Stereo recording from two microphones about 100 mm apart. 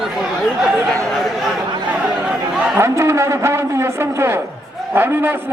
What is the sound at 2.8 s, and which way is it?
A man's voice, 25° right (ahead or behind).